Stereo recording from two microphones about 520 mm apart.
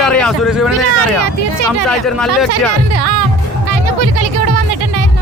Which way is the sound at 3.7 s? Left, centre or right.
Right.